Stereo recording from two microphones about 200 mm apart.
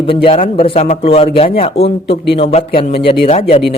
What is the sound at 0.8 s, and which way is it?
Speech, 45° left (ahead or behind).